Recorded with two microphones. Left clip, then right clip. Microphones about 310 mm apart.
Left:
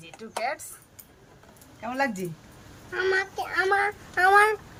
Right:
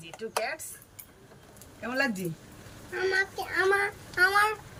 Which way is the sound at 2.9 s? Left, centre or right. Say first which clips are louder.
Left 2 dB; centre.